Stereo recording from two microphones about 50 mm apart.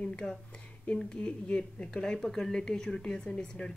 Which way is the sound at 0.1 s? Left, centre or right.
Centre.